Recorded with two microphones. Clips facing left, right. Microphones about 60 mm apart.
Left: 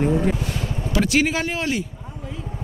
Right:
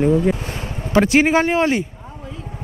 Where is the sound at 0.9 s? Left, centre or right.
Right.